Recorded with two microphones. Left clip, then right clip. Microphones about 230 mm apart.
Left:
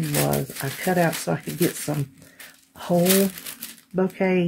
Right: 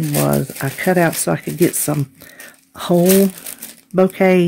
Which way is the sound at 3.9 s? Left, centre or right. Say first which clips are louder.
Right 9 dB; right.